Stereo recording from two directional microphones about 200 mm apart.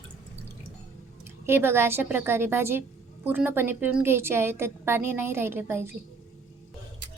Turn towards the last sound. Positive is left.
turn(degrees=-10)  # may be behind; listen again after turning